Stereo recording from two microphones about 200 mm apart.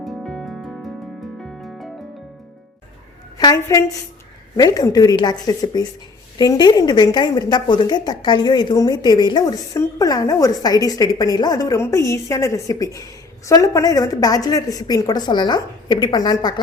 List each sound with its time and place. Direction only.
0.0 s music: centre (ahead or behind)
3.3 s a woman's voice: 15° left (ahead or behind)